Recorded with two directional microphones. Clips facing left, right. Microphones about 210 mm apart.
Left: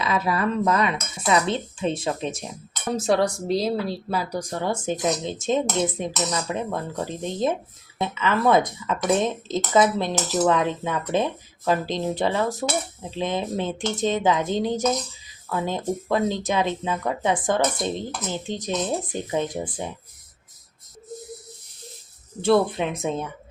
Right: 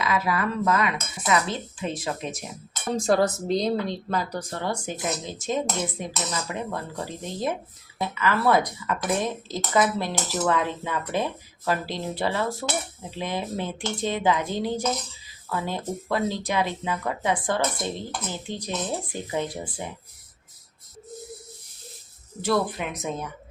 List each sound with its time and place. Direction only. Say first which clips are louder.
0.0 s speech: left 2 dB; 30° left (ahead or behind)
2.9 s speech: even; centre (ahead or behind); by 19.9 s 20° left (ahead or behind)
22.4 s speech: left 5 dB; 25° left (ahead or behind)